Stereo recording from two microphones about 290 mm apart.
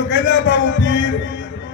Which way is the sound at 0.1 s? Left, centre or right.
Left.